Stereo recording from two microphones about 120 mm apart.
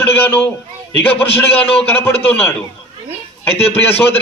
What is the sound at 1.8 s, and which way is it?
Speech, 20° left (ahead or behind).